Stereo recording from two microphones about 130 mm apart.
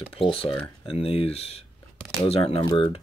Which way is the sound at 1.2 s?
50° left (ahead or behind).